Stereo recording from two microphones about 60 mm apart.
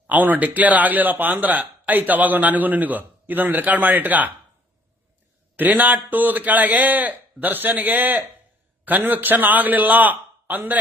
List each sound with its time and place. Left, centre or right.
0.1 s speech: right
5.5 s speech: right